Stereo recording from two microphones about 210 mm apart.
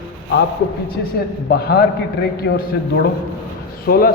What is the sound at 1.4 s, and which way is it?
A man's voice, 50° left (ahead or behind).